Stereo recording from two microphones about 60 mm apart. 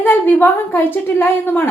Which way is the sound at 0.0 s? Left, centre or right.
Left.